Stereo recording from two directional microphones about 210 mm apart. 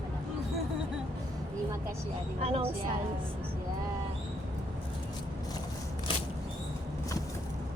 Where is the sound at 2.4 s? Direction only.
30° right (ahead or behind).